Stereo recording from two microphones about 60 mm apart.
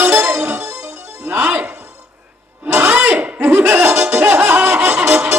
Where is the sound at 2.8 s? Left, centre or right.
Right.